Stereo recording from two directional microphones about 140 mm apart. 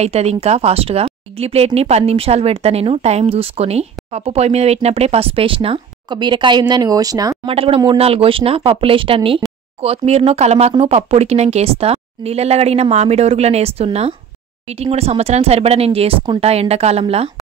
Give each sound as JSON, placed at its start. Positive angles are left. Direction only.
{"t": 0.0, "sound": "speech", "side_deg": -50}
{"t": 7.4, "sound": "speech", "side_deg": -40}